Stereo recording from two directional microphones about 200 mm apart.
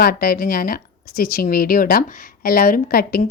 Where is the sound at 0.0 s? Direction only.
50° left (ahead or behind).